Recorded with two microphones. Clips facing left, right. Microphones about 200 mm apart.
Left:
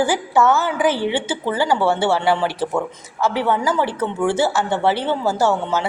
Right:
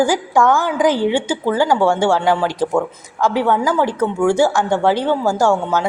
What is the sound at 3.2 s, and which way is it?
A woman's voice, 15° right (ahead or behind).